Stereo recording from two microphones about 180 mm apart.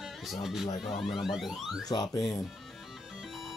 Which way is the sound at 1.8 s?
20° left (ahead or behind).